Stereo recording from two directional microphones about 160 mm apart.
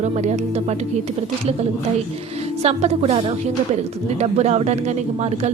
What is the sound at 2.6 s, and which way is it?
A woman's voice, 40° right (ahead or behind).